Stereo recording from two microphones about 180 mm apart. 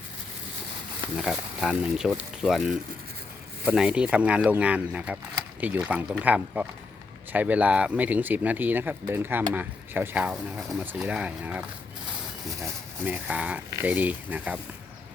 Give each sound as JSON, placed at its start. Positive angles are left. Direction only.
{"t": 1.1, "sound": "speech", "side_deg": -5}